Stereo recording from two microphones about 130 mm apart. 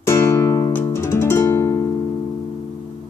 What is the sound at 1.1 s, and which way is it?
Music, 20° left (ahead or behind).